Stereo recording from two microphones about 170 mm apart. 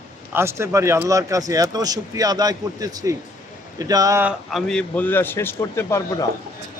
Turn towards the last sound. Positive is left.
turn(degrees=15)  # may be behind; listen again after turning